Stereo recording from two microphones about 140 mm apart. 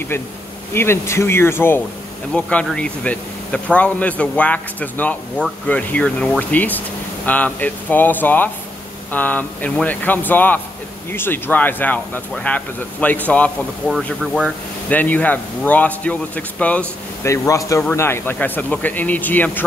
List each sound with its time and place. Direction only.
0.7 s speech: 20° left (ahead or behind)
2.3 s speech: 5° left (ahead or behind)
14.2 s speech: 5° left (ahead or behind)
17.3 s speech: 20° left (ahead or behind)